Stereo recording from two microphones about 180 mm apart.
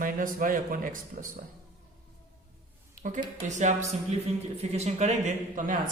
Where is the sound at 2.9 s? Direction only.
45° right (ahead or behind).